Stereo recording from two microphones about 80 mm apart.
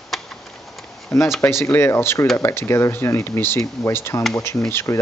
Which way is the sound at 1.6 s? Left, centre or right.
Left.